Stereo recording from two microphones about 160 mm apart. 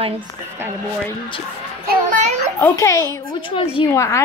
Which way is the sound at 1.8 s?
50° right (ahead or behind).